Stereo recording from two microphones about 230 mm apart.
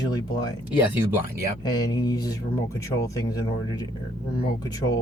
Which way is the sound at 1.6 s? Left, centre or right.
Centre.